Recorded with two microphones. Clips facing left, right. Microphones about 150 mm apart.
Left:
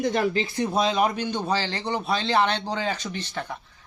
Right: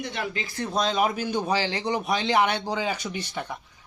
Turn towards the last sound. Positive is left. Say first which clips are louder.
# even
turn(degrees=-10)  # may be behind; listen again after turning